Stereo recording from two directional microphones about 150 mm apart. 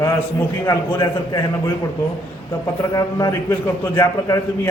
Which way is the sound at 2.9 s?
25° left (ahead or behind).